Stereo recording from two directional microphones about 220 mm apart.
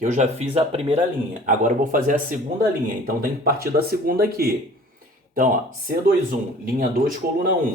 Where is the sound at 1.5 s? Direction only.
35° right (ahead or behind).